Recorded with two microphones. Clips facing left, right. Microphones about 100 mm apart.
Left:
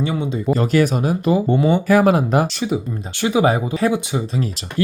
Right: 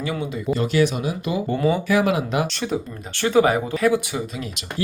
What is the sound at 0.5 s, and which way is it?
Speech, 45° left (ahead or behind).